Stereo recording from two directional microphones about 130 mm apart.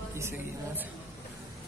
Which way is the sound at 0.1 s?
20° right (ahead or behind).